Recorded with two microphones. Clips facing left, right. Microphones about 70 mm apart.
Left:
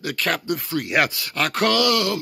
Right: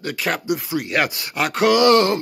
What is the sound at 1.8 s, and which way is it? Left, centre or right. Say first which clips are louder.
Speech: right 6 dB; right.